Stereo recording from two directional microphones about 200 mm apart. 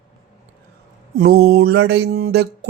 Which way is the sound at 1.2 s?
50° right (ahead or behind).